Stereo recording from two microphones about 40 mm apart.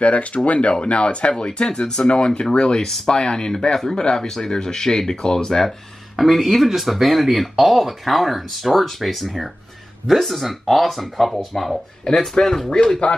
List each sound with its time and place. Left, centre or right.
0.0 s speech: left; by 5.7 s centre
6.1 s speech: centre
12.0 s speech: centre